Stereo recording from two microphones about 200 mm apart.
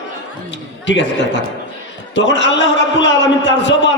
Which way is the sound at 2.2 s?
65° left (ahead or behind).